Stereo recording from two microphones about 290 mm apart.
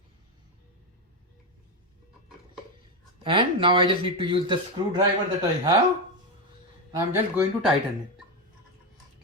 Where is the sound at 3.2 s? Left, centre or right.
Centre.